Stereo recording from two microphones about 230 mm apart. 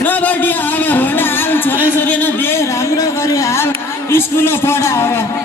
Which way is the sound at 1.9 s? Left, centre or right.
Centre.